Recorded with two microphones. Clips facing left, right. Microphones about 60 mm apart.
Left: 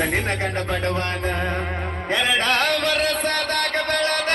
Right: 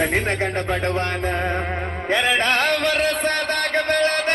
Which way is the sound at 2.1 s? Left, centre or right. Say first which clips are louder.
Right 1 dB; right.